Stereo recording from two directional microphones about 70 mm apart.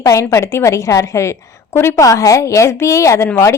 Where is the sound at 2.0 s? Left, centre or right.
Left.